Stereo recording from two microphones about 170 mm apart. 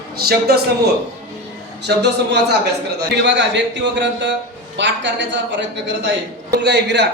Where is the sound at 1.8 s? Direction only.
80° right.